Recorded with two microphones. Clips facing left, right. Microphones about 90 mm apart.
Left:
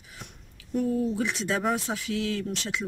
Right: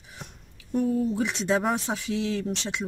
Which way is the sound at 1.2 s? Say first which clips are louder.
Right 3 dB; 20° right (ahead or behind).